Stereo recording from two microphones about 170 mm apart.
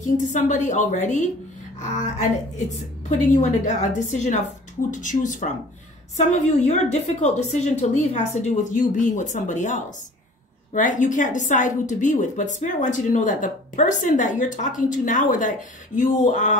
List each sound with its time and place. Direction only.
0.0 s a woman's voice: 45° left (ahead or behind)
3.1 s a woman's voice: 45° left (ahead or behind)